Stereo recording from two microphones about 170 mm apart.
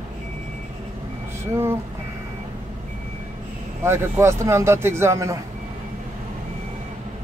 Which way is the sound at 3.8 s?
15° right (ahead or behind).